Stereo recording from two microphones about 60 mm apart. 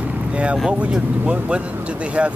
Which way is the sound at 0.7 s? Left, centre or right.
Right.